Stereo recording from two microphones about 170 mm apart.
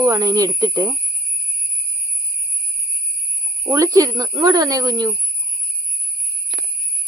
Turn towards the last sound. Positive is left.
turn(degrees=-20)  # may be behind; listen again after turning